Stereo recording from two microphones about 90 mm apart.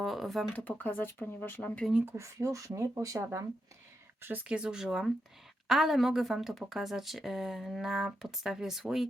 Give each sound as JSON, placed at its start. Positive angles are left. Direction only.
{"t": 0.0, "sound": "a woman's voice", "side_deg": 0}
{"t": 0.8, "sound": "speech", "side_deg": 15}
{"t": 2.0, "sound": "speech", "side_deg": -35}
{"t": 4.4, "sound": "a woman's voice", "side_deg": -10}